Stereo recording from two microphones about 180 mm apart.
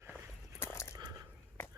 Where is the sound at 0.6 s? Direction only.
15° left (ahead or behind).